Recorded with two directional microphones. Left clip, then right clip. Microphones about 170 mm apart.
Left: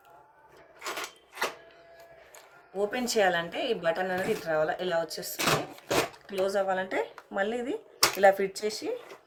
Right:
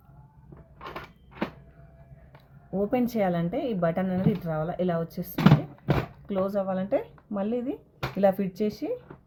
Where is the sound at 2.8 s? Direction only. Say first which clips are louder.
Even; 45° right (ahead or behind).